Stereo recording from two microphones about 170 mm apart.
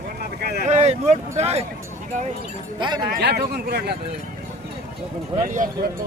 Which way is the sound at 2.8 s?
25° right (ahead or behind).